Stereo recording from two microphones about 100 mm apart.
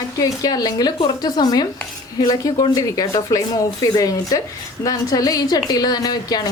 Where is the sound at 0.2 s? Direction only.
40° left (ahead or behind).